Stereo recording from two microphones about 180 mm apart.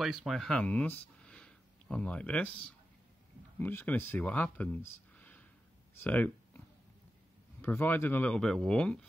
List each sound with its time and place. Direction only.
0.0 s speech: centre (ahead or behind)
7.6 s speech: 10° left (ahead or behind)